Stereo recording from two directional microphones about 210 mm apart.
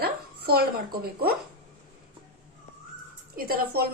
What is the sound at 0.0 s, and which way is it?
Speech, 50° right (ahead or behind).